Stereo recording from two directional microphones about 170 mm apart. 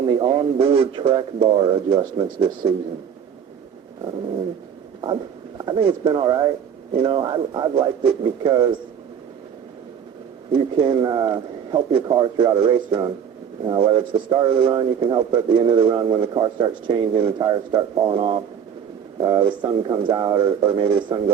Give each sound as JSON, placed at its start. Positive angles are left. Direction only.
{"t": 0.0, "sound": "a man's voice", "side_deg": -30}
{"t": 5.5, "sound": "a man's voice", "side_deg": -30}
{"t": 10.5, "sound": "a man's voice", "side_deg": -30}